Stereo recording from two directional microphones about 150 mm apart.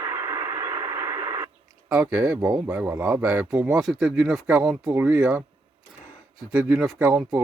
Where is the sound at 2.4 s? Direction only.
25° right (ahead or behind).